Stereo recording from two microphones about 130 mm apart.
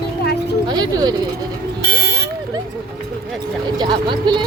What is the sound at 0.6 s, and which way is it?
Speech, 35° right (ahead or behind).